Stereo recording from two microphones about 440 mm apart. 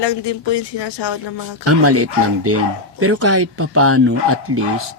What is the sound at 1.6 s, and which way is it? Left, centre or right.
Speech, right.